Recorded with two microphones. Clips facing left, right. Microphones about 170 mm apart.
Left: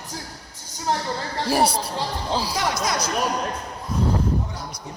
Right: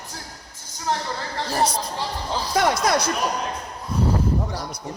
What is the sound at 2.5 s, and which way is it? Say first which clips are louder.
Speech: right 5 dB; 55° right (ahead or behind).